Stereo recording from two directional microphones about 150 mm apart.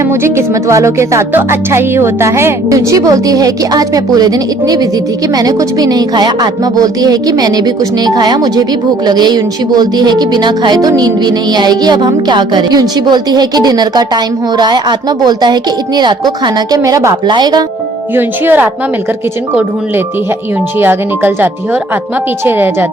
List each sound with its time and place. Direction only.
0.0 s speech: 20° right (ahead or behind)
18.1 s speech: 15° right (ahead or behind)
20.7 s speech: 15° right (ahead or behind)